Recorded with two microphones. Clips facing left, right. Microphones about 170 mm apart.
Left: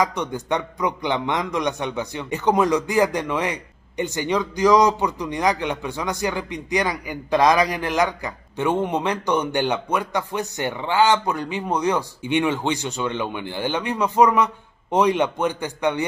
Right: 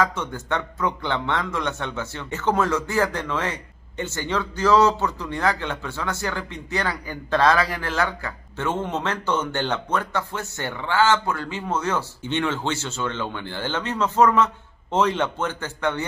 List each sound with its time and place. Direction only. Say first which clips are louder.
0.0 s a man's voice: left 1 dB; 15° left (ahead or behind)